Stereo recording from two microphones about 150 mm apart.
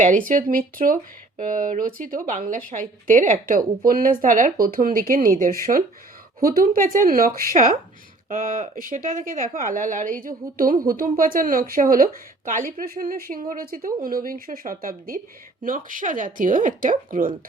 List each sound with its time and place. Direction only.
0.3 s speech: 65° right (ahead or behind)
3.8 s a woman's voice: 70° right (ahead or behind)
4.6 s a woman's voice: 70° right (ahead or behind)